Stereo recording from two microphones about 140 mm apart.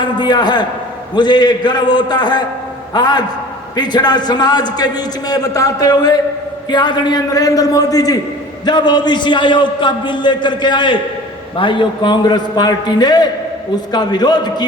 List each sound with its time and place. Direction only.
0.0 s a man's voice: 30° left (ahead or behind)